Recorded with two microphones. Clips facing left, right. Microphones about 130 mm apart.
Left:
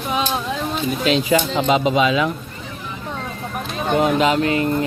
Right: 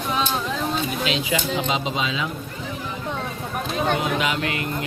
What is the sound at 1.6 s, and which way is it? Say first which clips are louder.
Speech: left 8 dB; 55° left (ahead or behind).